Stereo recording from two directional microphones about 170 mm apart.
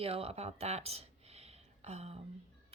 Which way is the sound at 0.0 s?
35° right (ahead or behind).